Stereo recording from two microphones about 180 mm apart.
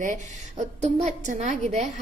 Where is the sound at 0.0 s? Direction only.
45° right (ahead or behind).